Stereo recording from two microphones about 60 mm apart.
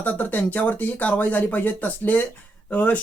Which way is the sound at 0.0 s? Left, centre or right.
Left.